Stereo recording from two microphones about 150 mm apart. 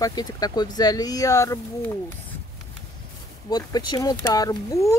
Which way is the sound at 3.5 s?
30° left (ahead or behind).